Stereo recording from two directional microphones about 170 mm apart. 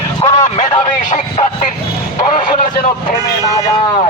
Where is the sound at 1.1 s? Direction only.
45° left (ahead or behind).